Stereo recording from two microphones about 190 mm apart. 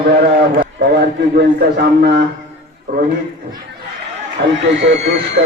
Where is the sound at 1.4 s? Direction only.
60° right (ahead or behind).